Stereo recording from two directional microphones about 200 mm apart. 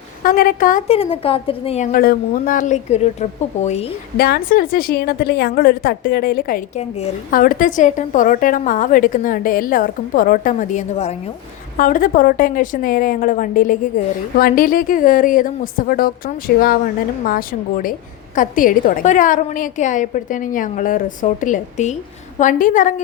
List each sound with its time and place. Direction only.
0.2 s a woman's voice: 45° left (ahead or behind)
0.9 s a woman's voice: 30° left (ahead or behind)
4.2 s a woman's voice: 50° left (ahead or behind)